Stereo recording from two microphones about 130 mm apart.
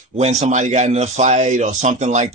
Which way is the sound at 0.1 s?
55° right (ahead or behind).